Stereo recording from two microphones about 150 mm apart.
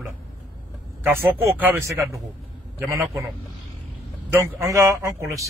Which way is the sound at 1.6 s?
15° right (ahead or behind).